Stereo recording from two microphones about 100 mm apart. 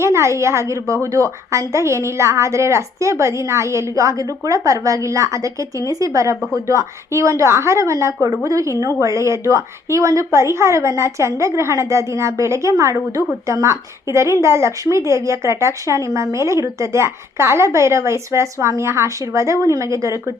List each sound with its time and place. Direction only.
0.0 s a woman's voice: 30° right (ahead or behind)